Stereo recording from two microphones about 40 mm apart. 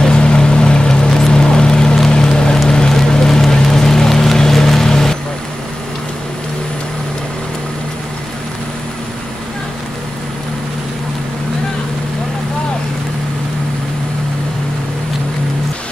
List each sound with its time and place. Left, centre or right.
0.0 s vehicle: left
2.0 s boat: centre
2.9 s vehicle: centre